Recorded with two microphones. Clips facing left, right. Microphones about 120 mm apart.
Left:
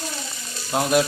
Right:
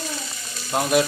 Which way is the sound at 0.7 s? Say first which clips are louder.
Even; centre (ahead or behind).